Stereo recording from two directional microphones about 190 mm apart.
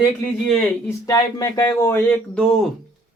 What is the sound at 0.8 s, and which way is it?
Speech, 15° left (ahead or behind).